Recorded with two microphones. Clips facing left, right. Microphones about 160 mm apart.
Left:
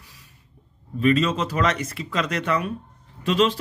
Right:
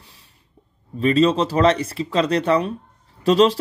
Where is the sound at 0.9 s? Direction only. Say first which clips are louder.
Right 4 dB; 30° right (ahead or behind).